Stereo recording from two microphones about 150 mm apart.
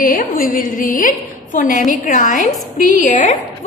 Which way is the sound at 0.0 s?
65° left (ahead or behind).